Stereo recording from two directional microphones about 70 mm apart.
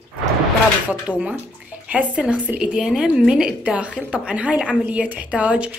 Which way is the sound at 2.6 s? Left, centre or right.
Centre.